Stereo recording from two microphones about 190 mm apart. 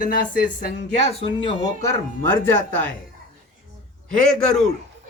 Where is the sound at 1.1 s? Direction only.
30° left (ahead or behind).